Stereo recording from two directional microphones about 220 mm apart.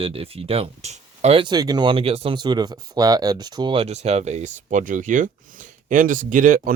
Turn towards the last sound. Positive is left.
turn(degrees=-35)  # may be behind; listen again after turning